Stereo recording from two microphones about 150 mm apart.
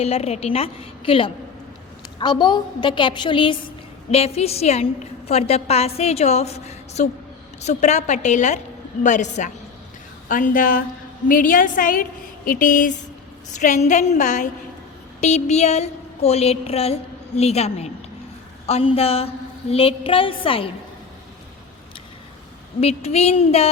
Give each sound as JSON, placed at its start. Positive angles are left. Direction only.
{"t": 0.0, "sound": "a woman's voice", "side_deg": 45}
{"t": 22.8, "sound": "a woman's voice", "side_deg": 45}